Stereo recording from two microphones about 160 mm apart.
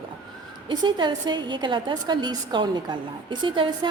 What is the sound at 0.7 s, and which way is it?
A woman's voice, 30° right (ahead or behind).